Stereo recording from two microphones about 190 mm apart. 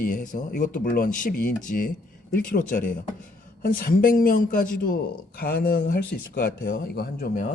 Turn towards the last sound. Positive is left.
turn(degrees=45)  # may be behind; listen again after turning